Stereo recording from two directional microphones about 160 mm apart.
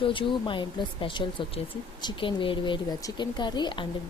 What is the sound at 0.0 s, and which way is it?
Speech, 30° left (ahead or behind).